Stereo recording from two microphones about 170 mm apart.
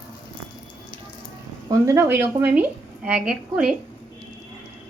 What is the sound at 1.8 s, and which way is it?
A woman's voice, 15° right (ahead or behind).